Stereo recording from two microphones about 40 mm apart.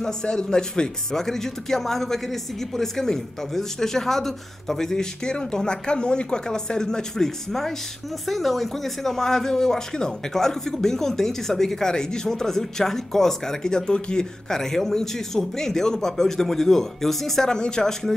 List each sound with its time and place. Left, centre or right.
0.0 s speech: centre
17.5 s speech: centre